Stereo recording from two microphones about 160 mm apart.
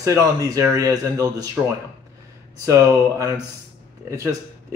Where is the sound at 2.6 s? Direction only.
20° right (ahead or behind).